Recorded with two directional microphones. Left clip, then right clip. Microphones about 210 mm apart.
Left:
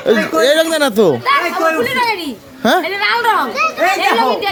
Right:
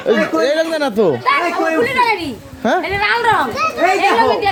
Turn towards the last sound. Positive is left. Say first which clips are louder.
# right 1 dB
turn(degrees=20)  # may be behind; listen again after turning